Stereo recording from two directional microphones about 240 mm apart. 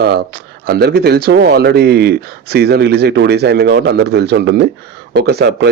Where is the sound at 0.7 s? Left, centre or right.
Right.